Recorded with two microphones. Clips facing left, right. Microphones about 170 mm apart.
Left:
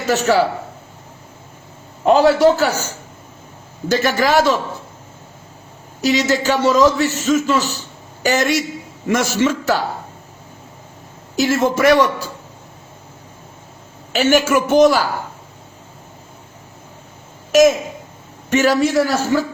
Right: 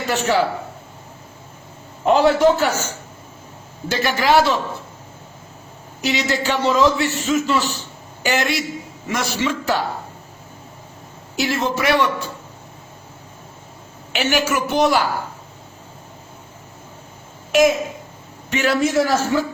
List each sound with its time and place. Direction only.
0.1 s a man's voice: 40° left (ahead or behind)
2.0 s a man's voice: 35° left (ahead or behind)
6.0 s a man's voice: 40° left (ahead or behind)
11.3 s a man's voice: 45° left (ahead or behind)
14.1 s a man's voice: 40° left (ahead or behind)
17.5 s a man's voice: 45° left (ahead or behind)